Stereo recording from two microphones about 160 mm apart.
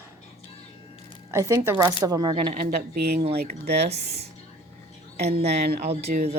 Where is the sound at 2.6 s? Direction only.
65° right (ahead or behind).